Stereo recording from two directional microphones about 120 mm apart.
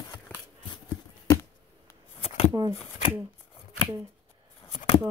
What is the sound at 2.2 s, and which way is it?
Shuffling cards, 60° left (ahead or behind).